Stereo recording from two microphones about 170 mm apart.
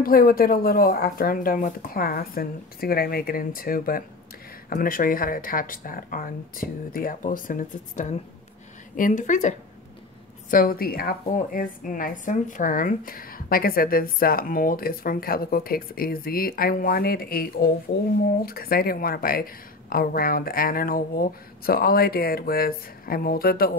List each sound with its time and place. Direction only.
0.0 s a woman's voice: 60° left (ahead or behind)
10.5 s a woman's voice: 55° left (ahead or behind)